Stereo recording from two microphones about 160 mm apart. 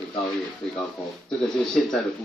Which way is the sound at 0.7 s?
5° left (ahead or behind).